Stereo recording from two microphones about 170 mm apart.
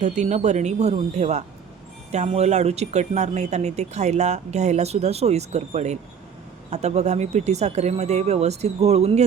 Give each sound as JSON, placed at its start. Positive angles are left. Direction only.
{"t": 0.0, "sound": "speech", "side_deg": -45}